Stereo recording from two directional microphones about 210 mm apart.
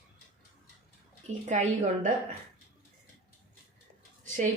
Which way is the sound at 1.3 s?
35° right (ahead or behind).